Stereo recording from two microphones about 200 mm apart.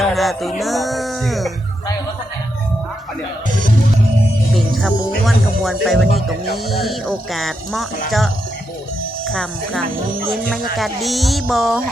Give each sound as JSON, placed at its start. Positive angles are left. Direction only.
{"t": 0.0, "sound": "music", "side_deg": 0}
{"t": 0.6, "sound": "speech", "side_deg": 0}
{"t": 4.5, "sound": "speech", "side_deg": 0}